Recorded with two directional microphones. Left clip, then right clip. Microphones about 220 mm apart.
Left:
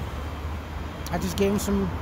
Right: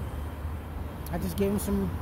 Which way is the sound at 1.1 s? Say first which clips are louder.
Left 5 dB; 10° left (ahead or behind).